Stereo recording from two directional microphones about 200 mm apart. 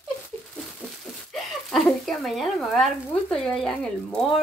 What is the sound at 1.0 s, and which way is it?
Speech, centre (ahead or behind).